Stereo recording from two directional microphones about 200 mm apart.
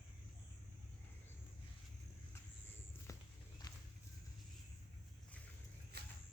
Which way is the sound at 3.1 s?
15° left (ahead or behind).